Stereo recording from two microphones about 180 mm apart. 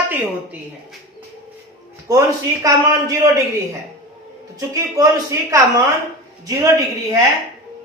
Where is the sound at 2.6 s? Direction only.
20° right (ahead or behind).